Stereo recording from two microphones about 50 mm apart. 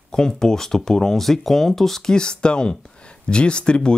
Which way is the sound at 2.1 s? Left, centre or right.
Centre.